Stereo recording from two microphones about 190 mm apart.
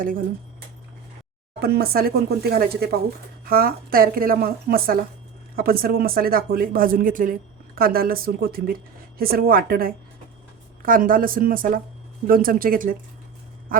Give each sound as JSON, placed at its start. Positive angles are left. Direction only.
{"t": 1.5, "sound": "speech", "side_deg": -55}